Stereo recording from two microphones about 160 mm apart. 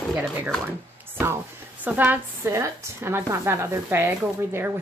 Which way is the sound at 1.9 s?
10° right (ahead or behind).